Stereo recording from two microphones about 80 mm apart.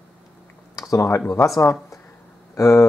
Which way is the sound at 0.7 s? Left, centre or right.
Left.